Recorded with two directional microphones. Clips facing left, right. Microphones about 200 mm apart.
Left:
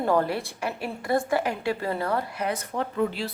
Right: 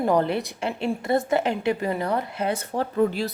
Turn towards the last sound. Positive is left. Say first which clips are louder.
# right 4 dB
turn(degrees=-40)  # may be behind; listen again after turning